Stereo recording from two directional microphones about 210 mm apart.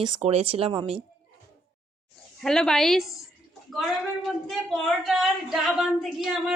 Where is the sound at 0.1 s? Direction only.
30° right (ahead or behind).